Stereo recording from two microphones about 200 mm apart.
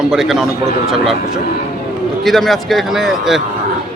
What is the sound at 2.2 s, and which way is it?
A man's voice, centre (ahead or behind).